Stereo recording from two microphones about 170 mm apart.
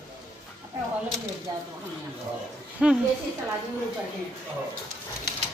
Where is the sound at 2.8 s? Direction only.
5° right (ahead or behind).